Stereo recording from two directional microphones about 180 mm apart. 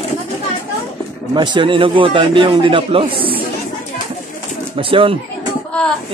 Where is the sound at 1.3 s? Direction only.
25° right (ahead or behind).